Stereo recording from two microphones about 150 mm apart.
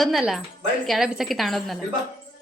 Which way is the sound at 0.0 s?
Centre (ahead or behind).